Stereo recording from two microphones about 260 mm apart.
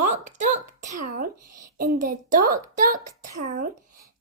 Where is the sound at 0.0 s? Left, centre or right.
Right.